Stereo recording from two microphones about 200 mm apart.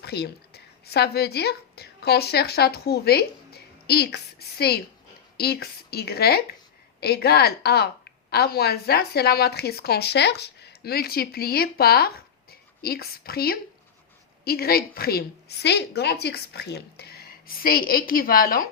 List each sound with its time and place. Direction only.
0.0 s a woman's voice: 55° left (ahead or behind)